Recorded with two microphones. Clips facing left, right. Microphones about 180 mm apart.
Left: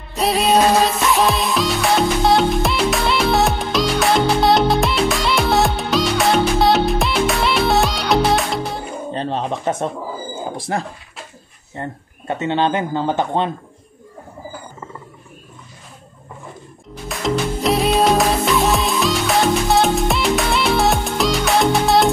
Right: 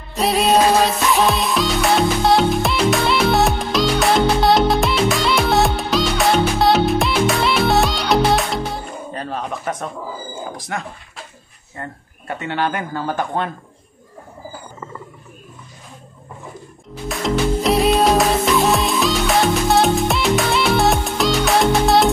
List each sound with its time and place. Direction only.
0.1 s music: centre (ahead or behind)
9.1 s speech: 25° left (ahead or behind)
17.1 s music: centre (ahead or behind)